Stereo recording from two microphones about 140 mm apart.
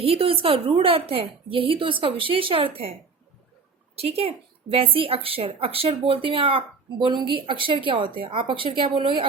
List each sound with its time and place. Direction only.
0.0 s speech: 40° right (ahead or behind)
3.9 s a woman's voice: 45° right (ahead or behind)